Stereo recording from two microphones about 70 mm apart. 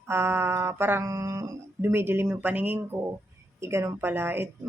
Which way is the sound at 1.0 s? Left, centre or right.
Right.